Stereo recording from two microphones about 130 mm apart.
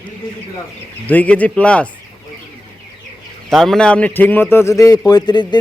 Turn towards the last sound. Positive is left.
turn(degrees=35)  # may be behind; listen again after turning